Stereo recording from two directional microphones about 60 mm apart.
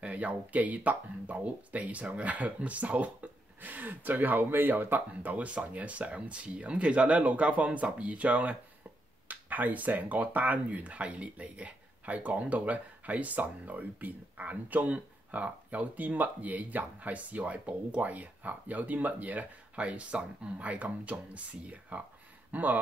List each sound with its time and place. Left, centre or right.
0.0 s speech: right